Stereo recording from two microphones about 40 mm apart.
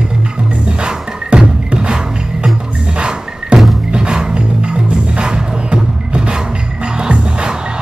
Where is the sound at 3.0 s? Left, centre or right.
Right.